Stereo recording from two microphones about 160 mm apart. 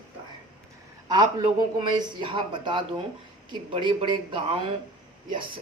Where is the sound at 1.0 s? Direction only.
25° right (ahead or behind).